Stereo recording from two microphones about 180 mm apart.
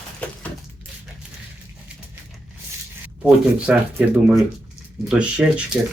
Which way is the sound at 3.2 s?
5° right (ahead or behind).